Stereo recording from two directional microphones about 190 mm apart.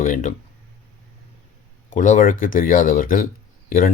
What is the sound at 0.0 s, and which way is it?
Speech, 40° left (ahead or behind).